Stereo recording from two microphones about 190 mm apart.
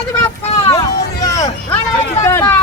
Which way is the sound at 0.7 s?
15° left (ahead or behind).